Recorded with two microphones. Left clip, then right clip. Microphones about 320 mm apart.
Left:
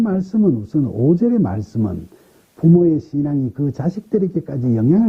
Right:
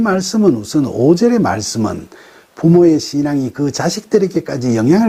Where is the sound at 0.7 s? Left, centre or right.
Centre.